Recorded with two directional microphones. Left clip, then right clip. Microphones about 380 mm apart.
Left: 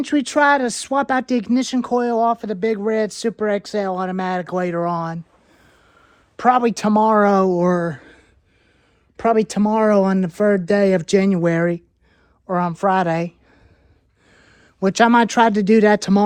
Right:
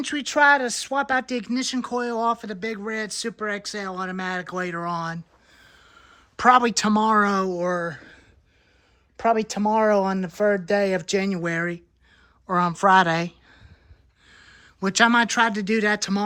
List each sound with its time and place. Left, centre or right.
0.0 s speech: centre